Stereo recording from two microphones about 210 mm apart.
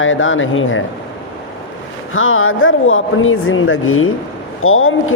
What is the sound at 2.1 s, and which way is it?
Speech, 75° left (ahead or behind).